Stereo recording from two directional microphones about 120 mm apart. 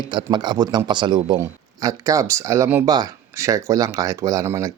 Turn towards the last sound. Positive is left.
turn(degrees=-25)  # may be behind; listen again after turning